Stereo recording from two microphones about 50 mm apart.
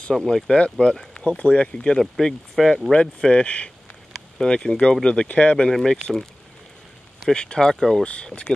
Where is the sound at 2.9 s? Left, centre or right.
Left.